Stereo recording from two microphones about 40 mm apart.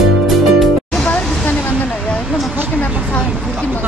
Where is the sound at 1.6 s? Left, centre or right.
Left.